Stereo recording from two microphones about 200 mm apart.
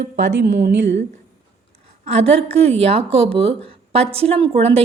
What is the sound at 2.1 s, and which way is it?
A woman's voice, 30° right (ahead or behind).